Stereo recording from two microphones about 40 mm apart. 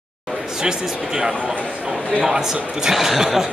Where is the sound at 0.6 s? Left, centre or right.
Centre.